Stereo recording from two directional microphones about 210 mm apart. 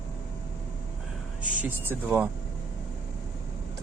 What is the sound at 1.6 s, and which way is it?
Speech, 10° right (ahead or behind).